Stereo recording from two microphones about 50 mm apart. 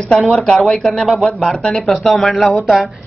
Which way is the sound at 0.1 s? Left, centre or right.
Centre.